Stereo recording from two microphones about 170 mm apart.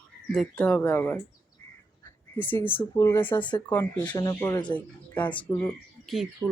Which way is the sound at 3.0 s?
15° left (ahead or behind).